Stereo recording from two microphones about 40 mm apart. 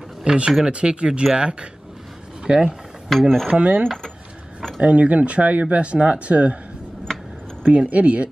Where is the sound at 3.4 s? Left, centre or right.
Right.